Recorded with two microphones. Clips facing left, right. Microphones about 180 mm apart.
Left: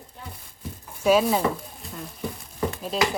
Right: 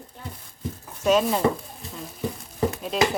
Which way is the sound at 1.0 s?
5° left (ahead or behind).